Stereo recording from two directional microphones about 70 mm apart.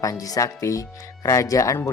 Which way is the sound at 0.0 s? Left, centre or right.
Left.